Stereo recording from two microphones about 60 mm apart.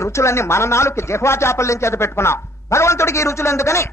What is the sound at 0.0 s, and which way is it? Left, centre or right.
Speech, left.